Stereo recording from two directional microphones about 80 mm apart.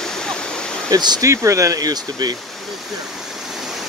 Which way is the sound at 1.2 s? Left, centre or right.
Right.